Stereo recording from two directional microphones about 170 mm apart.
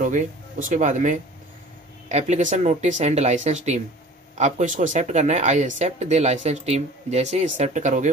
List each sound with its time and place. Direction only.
0.7 s speech: 45° right (ahead or behind)